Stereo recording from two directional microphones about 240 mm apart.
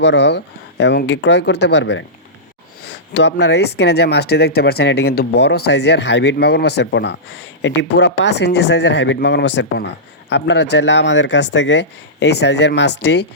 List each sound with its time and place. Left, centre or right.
0.0 s speech: left
3.2 s speech: left